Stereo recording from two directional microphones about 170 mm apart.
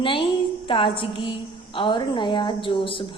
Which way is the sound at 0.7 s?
30° left (ahead or behind).